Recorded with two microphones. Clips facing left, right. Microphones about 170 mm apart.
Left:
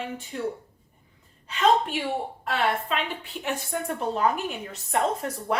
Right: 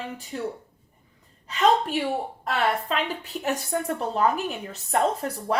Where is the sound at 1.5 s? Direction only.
40° right (ahead or behind).